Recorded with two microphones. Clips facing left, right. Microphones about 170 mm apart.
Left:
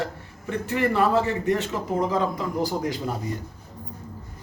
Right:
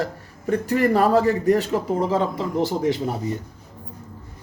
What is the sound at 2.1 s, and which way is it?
Speech, 30° right (ahead or behind).